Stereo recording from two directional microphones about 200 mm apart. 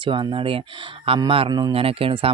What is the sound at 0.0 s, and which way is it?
Speech, 25° right (ahead or behind).